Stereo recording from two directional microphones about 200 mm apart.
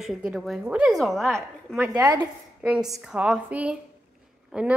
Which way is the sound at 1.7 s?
15° right (ahead or behind).